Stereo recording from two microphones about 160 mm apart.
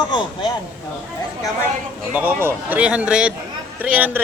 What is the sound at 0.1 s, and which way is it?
Speech, 30° left (ahead or behind).